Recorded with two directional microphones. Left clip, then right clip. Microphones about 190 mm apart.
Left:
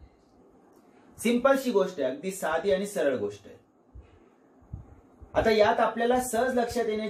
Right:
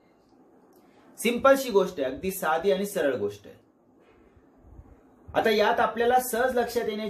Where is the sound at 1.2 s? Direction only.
50° right (ahead or behind).